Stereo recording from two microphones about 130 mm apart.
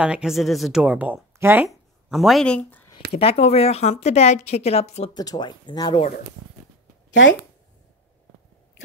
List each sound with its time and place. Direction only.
0.0 s speech: 5° right (ahead or behind)
1.7 s speech: centre (ahead or behind)
3.1 s a woman's voice: 50° left (ahead or behind)
5.1 s speech: 30° left (ahead or behind)